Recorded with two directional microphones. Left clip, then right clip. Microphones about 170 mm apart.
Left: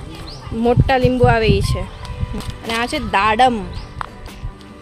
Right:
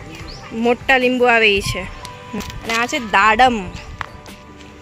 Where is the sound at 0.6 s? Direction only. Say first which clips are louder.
Right 1 dB; 5° left (ahead or behind).